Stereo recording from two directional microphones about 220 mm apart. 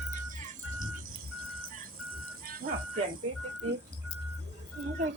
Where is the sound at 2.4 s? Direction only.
40° right (ahead or behind).